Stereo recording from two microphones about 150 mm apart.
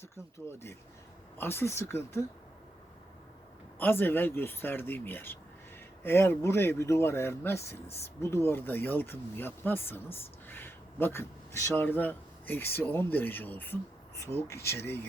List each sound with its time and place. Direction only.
0.3 s speech: 20° left (ahead or behind)
3.8 s speech: 15° left (ahead or behind)
7.6 s speech: 90° left
7.9 s speech: 15° left (ahead or behind)